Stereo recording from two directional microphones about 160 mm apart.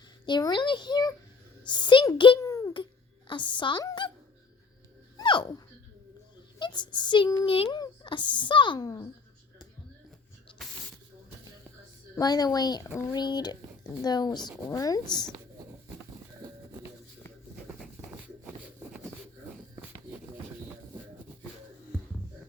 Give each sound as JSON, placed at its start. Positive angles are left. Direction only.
{"t": 0.3, "sound": "speech", "side_deg": 25}
{"t": 2.5, "sound": "a sound", "side_deg": 20}
{"t": 3.2, "sound": "speech", "side_deg": 30}
{"t": 5.1, "sound": "dog", "side_deg": 30}
{"t": 6.6, "sound": "a child's voice", "side_deg": 30}
{"t": 12.1, "sound": "speech", "side_deg": 25}